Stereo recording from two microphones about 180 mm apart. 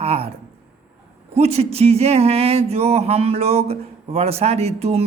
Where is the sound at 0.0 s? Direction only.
35° right (ahead or behind).